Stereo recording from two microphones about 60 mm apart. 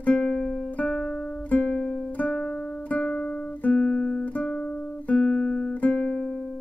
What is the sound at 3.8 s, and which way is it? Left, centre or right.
Guitar, centre.